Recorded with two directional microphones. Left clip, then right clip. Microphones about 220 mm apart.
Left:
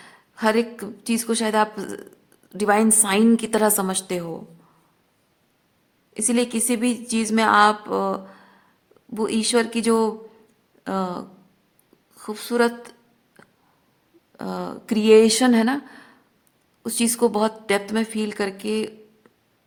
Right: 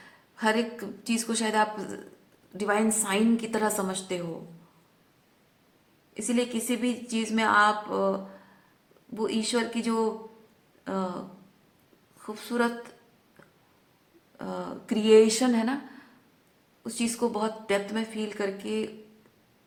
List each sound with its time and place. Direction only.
0.0 s a woman's voice: 40° left (ahead or behind)
6.1 s a woman's voice: 45° left (ahead or behind)
12.2 s speech: 40° left (ahead or behind)
14.3 s a woman's voice: 40° left (ahead or behind)